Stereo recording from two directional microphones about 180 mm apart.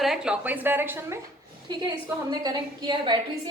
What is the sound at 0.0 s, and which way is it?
A woman's voice, 5° right (ahead or behind).